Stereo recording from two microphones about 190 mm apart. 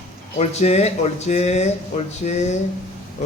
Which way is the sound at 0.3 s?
35° left (ahead or behind).